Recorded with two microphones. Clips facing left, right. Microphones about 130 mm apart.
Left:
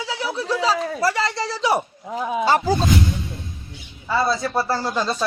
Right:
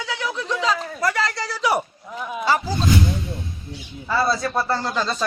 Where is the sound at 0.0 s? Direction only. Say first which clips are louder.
Left 1 dB; 30° left (ahead or behind).